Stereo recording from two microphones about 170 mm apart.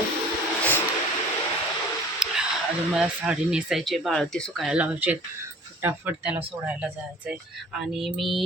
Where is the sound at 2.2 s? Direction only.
Centre (ahead or behind).